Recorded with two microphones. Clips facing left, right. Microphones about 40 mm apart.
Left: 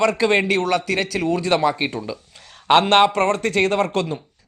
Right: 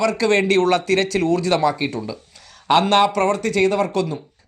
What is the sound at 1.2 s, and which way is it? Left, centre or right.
Speech, left.